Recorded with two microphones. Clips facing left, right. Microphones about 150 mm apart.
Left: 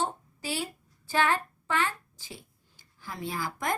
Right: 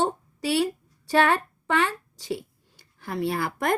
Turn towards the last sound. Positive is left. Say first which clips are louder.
# right 7 dB
turn(degrees=-65)  # may be behind; listen again after turning